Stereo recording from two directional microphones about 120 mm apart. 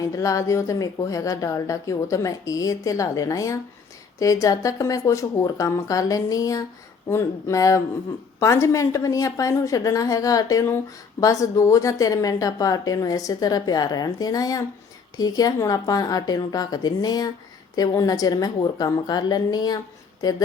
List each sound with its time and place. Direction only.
0.0 s a woman's voice: 25° left (ahead or behind)